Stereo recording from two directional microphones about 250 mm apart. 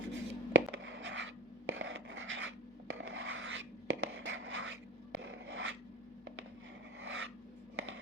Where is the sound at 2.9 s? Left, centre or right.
Right.